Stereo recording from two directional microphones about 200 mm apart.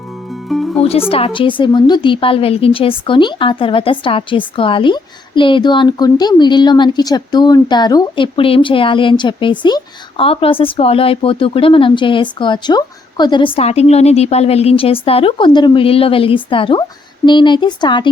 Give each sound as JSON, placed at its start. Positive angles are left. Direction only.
{"t": 0.4, "sound": "music", "side_deg": 0}
{"t": 0.8, "sound": "a woman's voice", "side_deg": 30}